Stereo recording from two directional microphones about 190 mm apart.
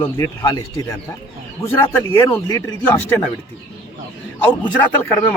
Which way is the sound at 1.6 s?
15° left (ahead or behind).